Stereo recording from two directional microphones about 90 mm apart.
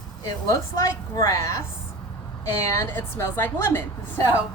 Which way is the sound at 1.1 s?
35° left (ahead or behind).